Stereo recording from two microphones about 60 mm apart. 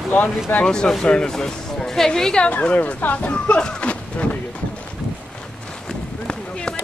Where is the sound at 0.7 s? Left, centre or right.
Centre.